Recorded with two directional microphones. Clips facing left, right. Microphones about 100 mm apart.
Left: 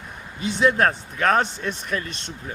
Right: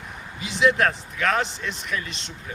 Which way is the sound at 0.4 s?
35° left (ahead or behind).